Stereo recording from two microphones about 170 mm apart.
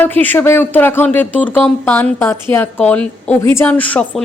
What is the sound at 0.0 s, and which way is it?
A woman's voice, 10° left (ahead or behind).